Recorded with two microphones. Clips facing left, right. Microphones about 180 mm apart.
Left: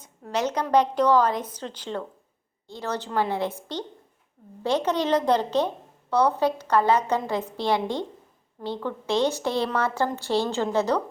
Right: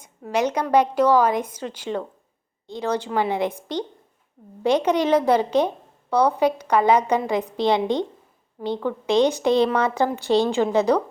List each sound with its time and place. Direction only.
0.0 s a woman's voice: 10° right (ahead or behind)